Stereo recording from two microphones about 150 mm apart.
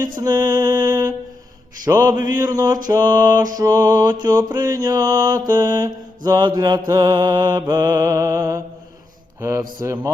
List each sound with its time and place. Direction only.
0.0 s music: 25° right (ahead or behind)
1.8 s mantra: 20° right (ahead or behind)